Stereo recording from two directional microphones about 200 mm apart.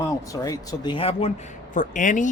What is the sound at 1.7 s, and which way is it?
Speech, 40° left (ahead or behind).